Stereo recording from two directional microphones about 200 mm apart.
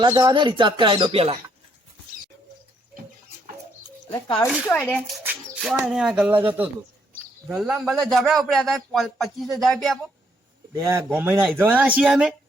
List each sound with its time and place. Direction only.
0.0 s speech: 20° right (ahead or behind)
4.4 s a man's voice: 5° left (ahead or behind)
5.2 s mouse: 5° right (ahead or behind)
5.8 s a man's voice: 5° right (ahead or behind)
7.5 s a man's voice: 5° right (ahead or behind)
10.8 s a man's voice: 15° right (ahead or behind)